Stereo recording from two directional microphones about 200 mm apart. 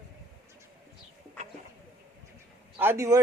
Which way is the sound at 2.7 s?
15° right (ahead or behind).